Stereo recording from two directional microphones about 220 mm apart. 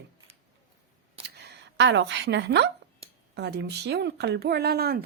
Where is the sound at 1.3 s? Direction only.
50° right (ahead or behind).